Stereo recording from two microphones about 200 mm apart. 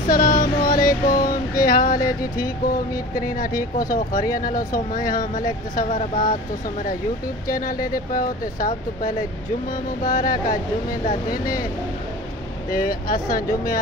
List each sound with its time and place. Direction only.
0.1 s child singing: 45° left (ahead or behind)
3.2 s speech: 45° left (ahead or behind)
7.4 s speech: 45° left (ahead or behind)
12.7 s speech: 45° left (ahead or behind)